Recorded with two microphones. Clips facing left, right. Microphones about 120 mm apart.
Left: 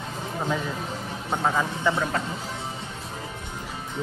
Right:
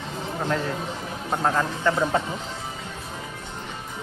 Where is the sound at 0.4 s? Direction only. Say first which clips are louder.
Right 2 dB; 5° left (ahead or behind).